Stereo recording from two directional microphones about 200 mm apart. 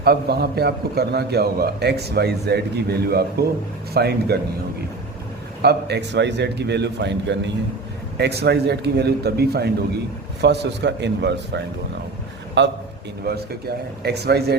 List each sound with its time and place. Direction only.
0.0 s a man's voice: 50° right (ahead or behind)
5.6 s a man's voice: 60° right (ahead or behind)